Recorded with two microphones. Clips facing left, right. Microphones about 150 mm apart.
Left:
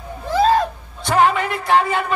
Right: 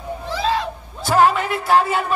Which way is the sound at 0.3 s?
50° left (ahead or behind).